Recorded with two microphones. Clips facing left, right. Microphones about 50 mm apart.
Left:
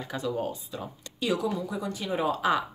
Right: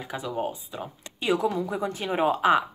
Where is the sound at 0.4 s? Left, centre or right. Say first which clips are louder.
Right 2 dB; right.